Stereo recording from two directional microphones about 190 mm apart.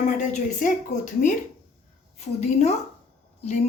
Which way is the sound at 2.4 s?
35° left (ahead or behind).